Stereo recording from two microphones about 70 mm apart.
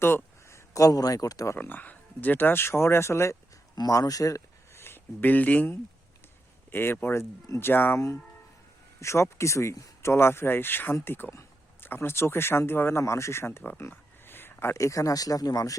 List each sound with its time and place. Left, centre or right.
0.0 s a sound: left
0.7 s speech: left
1.5 s speech: left
3.8 s speech: left
4.8 s speech: left
6.7 s speech: left
7.9 s speech: left
14.7 s speech: left